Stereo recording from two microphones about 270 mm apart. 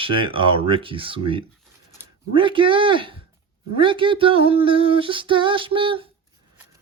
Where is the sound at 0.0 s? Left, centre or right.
Centre.